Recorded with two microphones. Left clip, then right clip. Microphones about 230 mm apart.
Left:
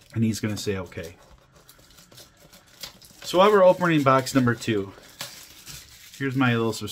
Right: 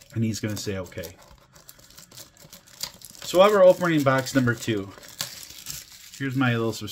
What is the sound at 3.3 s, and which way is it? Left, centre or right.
Speech, centre.